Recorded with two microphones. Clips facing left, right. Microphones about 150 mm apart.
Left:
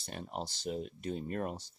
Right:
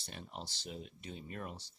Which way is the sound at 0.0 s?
45° left (ahead or behind).